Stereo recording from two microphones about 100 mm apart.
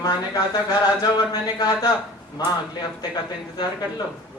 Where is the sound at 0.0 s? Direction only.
40° left (ahead or behind).